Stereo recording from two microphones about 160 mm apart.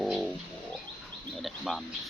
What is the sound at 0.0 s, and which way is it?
Bird, centre (ahead or behind).